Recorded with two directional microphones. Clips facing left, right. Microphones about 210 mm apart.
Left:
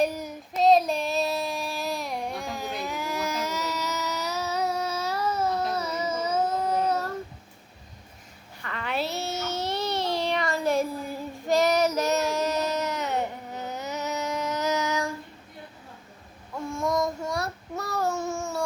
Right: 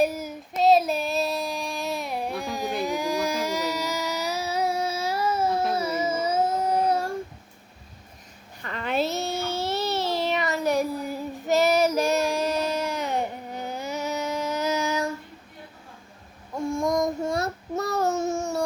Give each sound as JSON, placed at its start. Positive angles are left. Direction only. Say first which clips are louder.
{"t": 0.0, "sound": "child singing", "louder": "right 2 dB", "side_deg": -5}
{"t": 2.6, "sound": "a sound", "louder": "right 8 dB", "side_deg": -15}
{"t": 6.1, "sound": "child singing", "louder": "even", "side_deg": -10}
{"t": 8.6, "sound": "child singing", "louder": "right 4 dB", "side_deg": -30}
{"t": 14.4, "sound": "a sound", "louder": "right 1 dB", "side_deg": -10}
{"t": 16.6, "sound": "child singing", "louder": "right 3 dB", "side_deg": -15}